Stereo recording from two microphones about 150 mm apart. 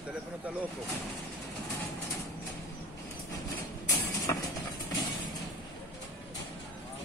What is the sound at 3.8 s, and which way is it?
Vehicle, 20° left (ahead or behind).